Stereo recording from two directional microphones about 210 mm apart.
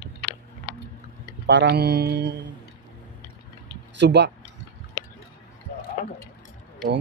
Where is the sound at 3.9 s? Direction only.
55° right (ahead or behind).